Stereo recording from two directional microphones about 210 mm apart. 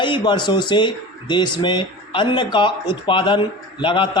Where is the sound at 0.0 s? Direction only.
20° left (ahead or behind).